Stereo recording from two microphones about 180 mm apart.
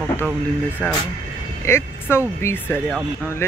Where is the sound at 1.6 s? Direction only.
15° left (ahead or behind).